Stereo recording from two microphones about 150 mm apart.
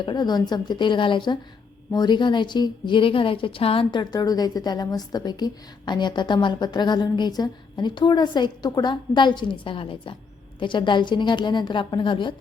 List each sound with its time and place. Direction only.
0.0 s a woman's voice: 30° left (ahead or behind)
4.1 s a woman's voice: 25° left (ahead or behind)